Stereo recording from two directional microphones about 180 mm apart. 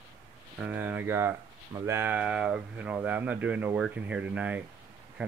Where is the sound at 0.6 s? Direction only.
10° right (ahead or behind).